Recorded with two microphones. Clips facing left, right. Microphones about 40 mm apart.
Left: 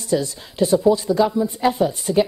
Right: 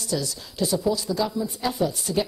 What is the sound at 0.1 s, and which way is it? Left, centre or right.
Speech, left.